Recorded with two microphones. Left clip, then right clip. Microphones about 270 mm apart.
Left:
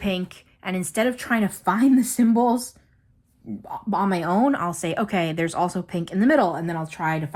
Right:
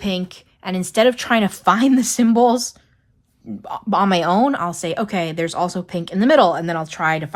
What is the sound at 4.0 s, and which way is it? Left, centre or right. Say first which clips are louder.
Speech: right 6 dB; centre.